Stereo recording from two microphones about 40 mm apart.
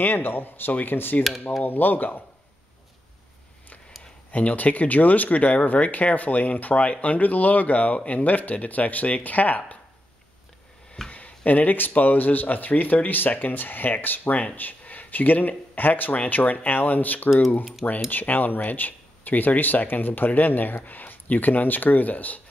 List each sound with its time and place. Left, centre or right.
0.0 s speech: left
4.3 s speech: left
11.1 s a sound: left
11.9 s speech: left